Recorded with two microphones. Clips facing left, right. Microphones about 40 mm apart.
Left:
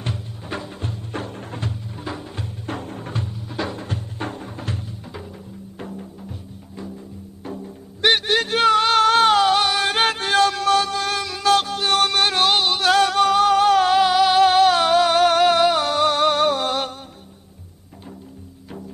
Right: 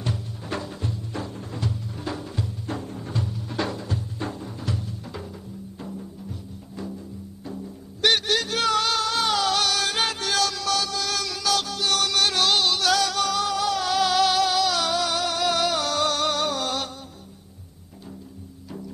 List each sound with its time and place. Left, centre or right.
0.5 s music: left
0.7 s music: left
2.0 s music: centre
2.3 s music: left
3.4 s music: centre
3.7 s music: left
7.5 s music: left
11.1 s music: left
11.4 s music: left